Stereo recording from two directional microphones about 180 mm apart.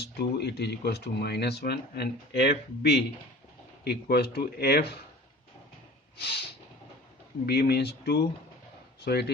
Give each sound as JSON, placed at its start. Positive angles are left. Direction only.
{"t": 0.0, "sound": "speech", "side_deg": 65}
{"t": 6.1, "sound": "speech", "side_deg": 65}
{"t": 7.4, "sound": "speech", "side_deg": 60}